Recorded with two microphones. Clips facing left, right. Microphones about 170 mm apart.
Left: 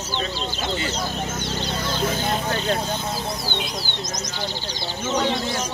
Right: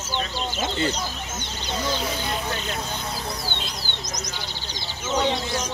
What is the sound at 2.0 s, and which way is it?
Speech, 50° left (ahead or behind).